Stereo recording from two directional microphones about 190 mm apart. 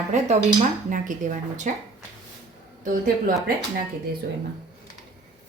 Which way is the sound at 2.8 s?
45° right (ahead or behind).